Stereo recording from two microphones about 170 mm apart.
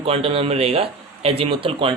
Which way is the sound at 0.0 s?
35° right (ahead or behind).